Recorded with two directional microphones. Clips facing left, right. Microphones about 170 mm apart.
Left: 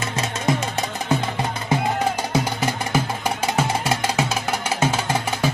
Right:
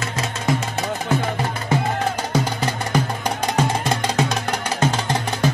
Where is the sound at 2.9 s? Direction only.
5° left (ahead or behind).